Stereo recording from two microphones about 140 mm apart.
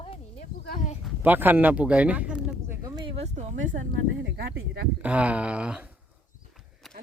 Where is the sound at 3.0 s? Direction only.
40° right (ahead or behind).